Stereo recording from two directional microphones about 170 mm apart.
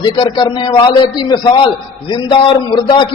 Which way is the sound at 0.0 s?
30° left (ahead or behind).